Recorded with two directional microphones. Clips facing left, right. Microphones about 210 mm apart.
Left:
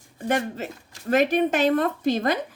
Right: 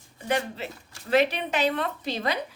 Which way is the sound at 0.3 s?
45° left (ahead or behind).